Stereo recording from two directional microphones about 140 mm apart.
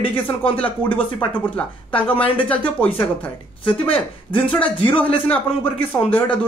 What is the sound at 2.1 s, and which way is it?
Speech, 40° left (ahead or behind).